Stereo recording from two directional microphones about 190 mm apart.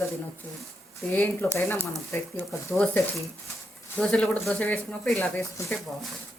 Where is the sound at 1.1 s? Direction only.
10° left (ahead or behind).